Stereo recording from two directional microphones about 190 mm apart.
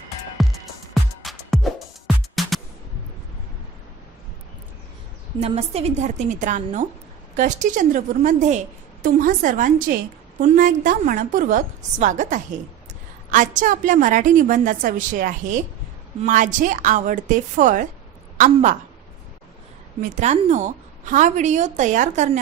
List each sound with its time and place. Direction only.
0.4 s music: centre (ahead or behind)
5.4 s a woman's voice: 35° right (ahead or behind)
20.0 s a woman's voice: 35° right (ahead or behind)